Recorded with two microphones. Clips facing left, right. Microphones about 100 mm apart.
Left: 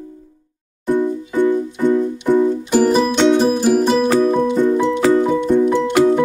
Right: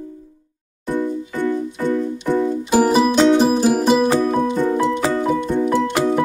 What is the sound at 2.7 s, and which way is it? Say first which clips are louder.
Music: right 2 dB; 10° right (ahead or behind).